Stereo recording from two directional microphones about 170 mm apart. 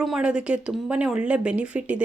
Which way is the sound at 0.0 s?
5° right (ahead or behind).